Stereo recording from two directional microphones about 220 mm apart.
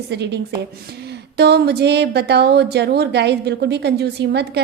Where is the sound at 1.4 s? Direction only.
50° right (ahead or behind).